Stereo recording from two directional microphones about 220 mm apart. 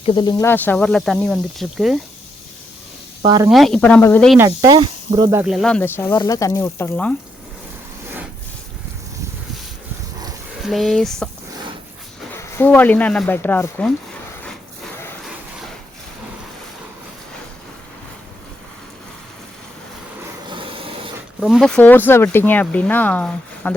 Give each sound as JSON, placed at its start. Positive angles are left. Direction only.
{"t": 0.0, "sound": "speech", "side_deg": 20}
{"t": 3.2, "sound": "speech", "side_deg": -15}
{"t": 3.5, "sound": "speech", "side_deg": 0}
{"t": 4.4, "sound": "speech", "side_deg": -15}
{"t": 5.4, "sound": "speech", "side_deg": 0}
{"t": 10.6, "sound": "speech", "side_deg": 0}
{"t": 12.4, "sound": "speech", "side_deg": 10}
{"t": 20.5, "sound": "a sound", "side_deg": -25}
{"t": 21.4, "sound": "speech", "side_deg": 0}